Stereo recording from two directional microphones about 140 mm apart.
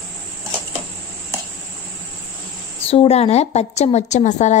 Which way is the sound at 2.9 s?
45° left (ahead or behind).